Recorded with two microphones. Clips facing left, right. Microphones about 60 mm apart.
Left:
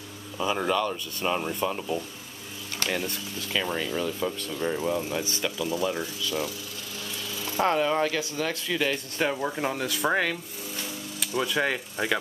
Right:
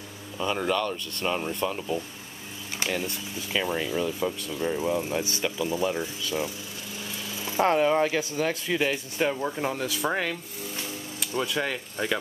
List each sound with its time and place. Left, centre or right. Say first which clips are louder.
0.4 s speech: left 1 dB; centre
3.1 s speech: even; centre
4.6 s speech: even; centre
5.4 s speech: even; right
7.3 s vehicle: right 2 dB; centre
8.0 s speech: right 2 dB; right
9.2 s speech: even; centre
11.5 s speech: left 2 dB; centre